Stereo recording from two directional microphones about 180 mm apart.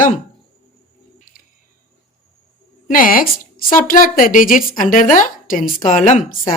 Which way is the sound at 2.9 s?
50° left (ahead or behind).